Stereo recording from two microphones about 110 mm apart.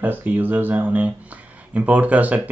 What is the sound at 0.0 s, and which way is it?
Speech, 15° right (ahead or behind).